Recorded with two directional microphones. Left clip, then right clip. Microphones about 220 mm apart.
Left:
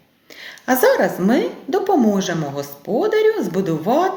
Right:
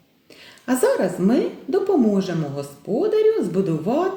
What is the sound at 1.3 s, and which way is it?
A woman's voice, 10° right (ahead or behind).